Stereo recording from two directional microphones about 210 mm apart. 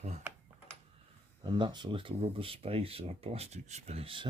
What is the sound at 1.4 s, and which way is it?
Speech, 20° right (ahead or behind).